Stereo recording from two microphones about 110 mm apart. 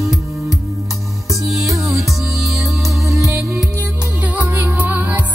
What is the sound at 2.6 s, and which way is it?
Music, 30° right (ahead or behind).